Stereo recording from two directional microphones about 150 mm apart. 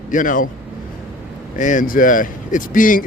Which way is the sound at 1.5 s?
60° left (ahead or behind).